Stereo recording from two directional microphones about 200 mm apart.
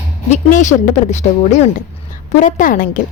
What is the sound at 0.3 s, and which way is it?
A woman's voice, 35° left (ahead or behind).